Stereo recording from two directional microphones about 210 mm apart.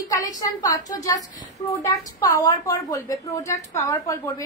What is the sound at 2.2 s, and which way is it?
A woman's voice, 15° left (ahead or behind).